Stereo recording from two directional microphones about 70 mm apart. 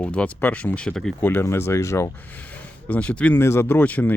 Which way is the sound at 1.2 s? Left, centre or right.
Left.